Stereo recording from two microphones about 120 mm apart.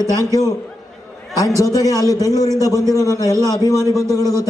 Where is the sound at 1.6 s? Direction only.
30° left (ahead or behind).